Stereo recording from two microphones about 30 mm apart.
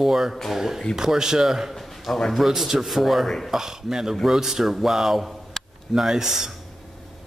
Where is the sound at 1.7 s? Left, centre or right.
Centre.